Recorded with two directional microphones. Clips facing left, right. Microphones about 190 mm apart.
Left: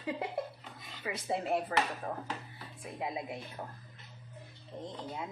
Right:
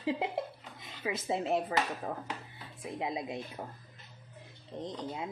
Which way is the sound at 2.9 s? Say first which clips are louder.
Right 2 dB; 20° right (ahead or behind).